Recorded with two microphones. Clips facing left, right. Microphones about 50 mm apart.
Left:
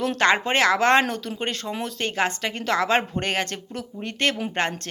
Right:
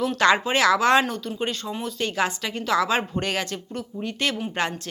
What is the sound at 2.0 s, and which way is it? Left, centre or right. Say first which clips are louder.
Speech: even; left.